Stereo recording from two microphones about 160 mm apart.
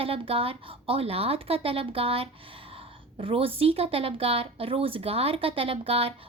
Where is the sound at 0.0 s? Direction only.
35° right (ahead or behind).